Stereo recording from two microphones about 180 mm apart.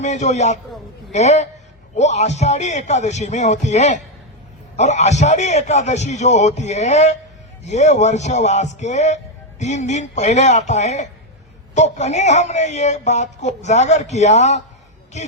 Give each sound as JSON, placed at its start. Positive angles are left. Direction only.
{"t": 0.0, "sound": "a man's voice", "side_deg": 40}